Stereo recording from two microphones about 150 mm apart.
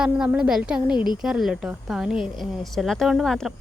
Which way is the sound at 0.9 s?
30° left (ahead or behind).